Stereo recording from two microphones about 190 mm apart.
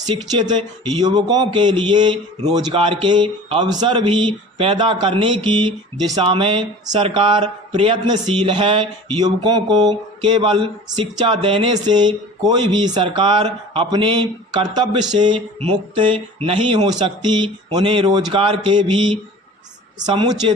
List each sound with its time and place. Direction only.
0.1 s speech: 25° right (ahead or behind)